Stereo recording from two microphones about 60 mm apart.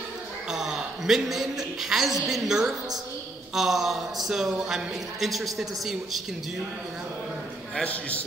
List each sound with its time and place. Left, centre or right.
0.5 s a man's voice: centre
7.8 s a man's voice: left